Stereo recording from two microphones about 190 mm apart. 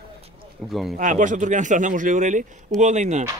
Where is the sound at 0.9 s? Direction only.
40° right (ahead or behind).